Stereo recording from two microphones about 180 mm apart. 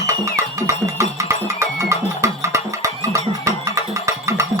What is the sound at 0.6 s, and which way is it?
Music, 15° right (ahead or behind).